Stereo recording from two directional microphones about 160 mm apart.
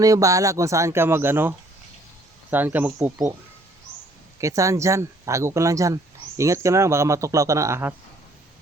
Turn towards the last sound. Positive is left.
turn(degrees=-15)  # may be behind; listen again after turning